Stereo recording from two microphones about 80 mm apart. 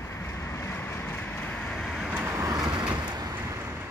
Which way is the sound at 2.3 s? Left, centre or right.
Right.